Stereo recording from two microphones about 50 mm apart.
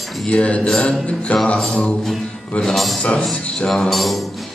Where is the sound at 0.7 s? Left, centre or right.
Centre.